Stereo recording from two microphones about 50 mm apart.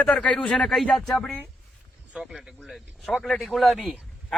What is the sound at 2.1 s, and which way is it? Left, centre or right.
Speech, centre.